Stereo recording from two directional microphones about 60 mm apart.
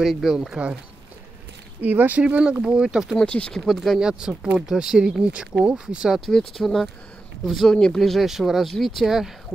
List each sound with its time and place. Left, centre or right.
0.0 s speech: centre
1.8 s speech: right
2.2 s speech: centre
3.2 s speech: centre
3.5 s speech: centre
4.0 s speech: centre
6.0 s speech: centre
7.7 s speech: centre